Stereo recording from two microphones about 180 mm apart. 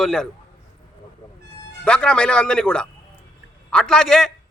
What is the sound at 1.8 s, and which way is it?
A man's voice, 5° left (ahead or behind).